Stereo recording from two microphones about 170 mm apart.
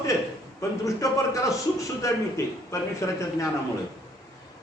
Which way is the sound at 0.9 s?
20° left (ahead or behind).